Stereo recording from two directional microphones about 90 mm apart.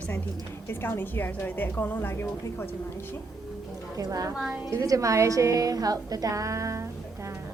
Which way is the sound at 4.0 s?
40° right (ahead or behind).